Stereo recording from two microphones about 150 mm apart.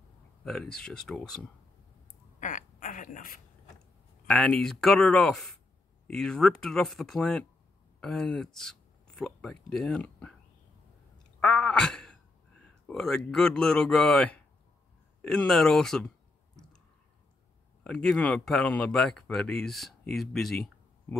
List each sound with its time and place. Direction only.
0.4 s speech: 5° left (ahead or behind)
2.4 s a sound: 60° left (ahead or behind)
4.3 s speech: 5° left (ahead or behind)
11.3 s a sound: 5° left (ahead or behind)
15.2 s speech: 5° left (ahead or behind)
17.8 s speech: 5° left (ahead or behind)